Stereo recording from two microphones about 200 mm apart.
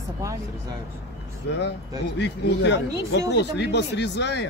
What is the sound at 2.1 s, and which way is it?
Speech, 60° left (ahead or behind).